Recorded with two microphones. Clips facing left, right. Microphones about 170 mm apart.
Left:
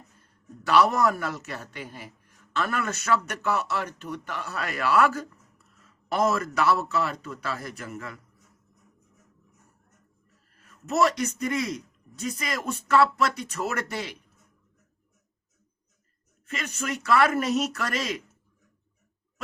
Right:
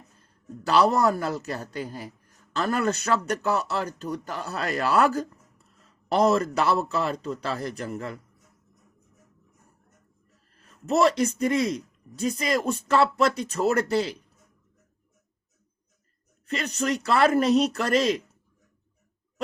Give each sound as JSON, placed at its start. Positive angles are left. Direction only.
{"t": 0.2, "sound": "a man's voice", "side_deg": -30}
{"t": 10.5, "sound": "a man's voice", "side_deg": -30}
{"t": 16.5, "sound": "a man's voice", "side_deg": -35}